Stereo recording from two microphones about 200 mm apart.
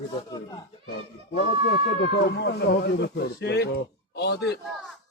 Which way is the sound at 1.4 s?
55° left (ahead or behind).